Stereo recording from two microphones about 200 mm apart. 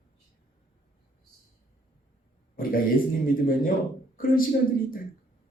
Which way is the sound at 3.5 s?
45° left (ahead or behind).